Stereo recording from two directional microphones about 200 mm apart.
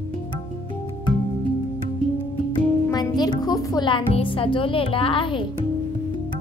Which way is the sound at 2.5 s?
20° left (ahead or behind).